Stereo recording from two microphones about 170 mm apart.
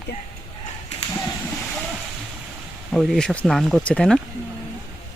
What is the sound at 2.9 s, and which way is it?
Speech, centre (ahead or behind).